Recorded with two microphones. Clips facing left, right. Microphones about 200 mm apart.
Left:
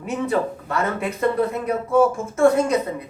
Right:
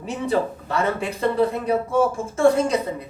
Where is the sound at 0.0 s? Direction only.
30° right (ahead or behind).